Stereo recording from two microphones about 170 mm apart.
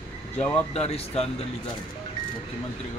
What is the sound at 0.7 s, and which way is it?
Speech, 35° left (ahead or behind).